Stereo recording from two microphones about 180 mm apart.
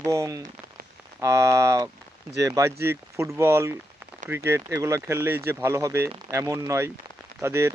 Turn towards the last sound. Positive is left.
turn(degrees=-15)  # may be behind; listen again after turning